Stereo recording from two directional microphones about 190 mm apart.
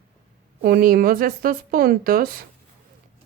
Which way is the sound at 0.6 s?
50° right (ahead or behind).